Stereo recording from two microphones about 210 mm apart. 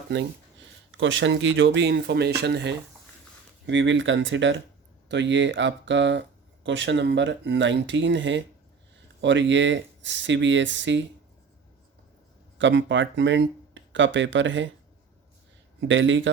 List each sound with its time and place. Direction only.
0.9 s speech: 65° right (ahead or behind)
12.5 s speech: 60° right (ahead or behind)
15.8 s speech: 60° right (ahead or behind)